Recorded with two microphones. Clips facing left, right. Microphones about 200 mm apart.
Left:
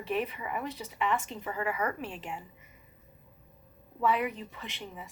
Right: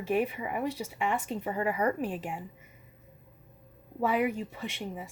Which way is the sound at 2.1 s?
45° right (ahead or behind).